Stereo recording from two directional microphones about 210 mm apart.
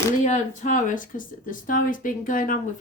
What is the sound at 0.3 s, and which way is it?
Speech, 35° left (ahead or behind).